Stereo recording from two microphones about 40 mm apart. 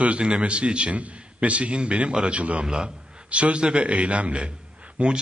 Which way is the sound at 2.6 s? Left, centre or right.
Centre.